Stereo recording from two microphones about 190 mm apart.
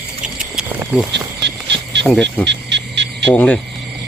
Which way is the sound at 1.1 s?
65° right (ahead or behind).